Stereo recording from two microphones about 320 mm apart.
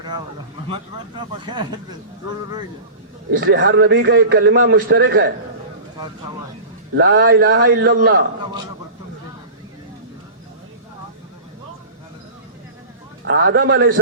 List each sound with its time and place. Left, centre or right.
0.7 s speech: centre
3.3 s a man's voice: right
6.9 s a man's voice: right
13.2 s a man's voice: right